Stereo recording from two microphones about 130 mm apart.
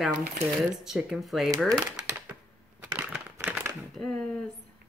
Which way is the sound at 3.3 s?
20° right (ahead or behind).